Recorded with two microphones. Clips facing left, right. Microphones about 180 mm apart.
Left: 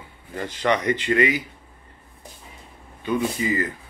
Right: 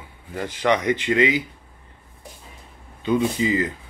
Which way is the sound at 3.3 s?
20° right (ahead or behind).